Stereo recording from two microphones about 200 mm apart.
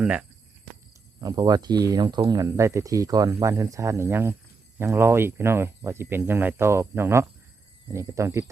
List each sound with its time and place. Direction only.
0.0 s speech: 5° right (ahead or behind)
1.2 s speech: 20° right (ahead or behind)